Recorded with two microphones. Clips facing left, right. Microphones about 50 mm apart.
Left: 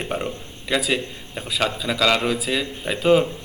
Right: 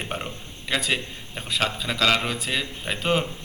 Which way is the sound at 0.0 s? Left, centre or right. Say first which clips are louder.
Left 5 dB; centre.